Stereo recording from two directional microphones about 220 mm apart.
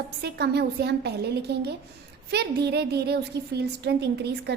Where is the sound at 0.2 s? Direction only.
50° right (ahead or behind).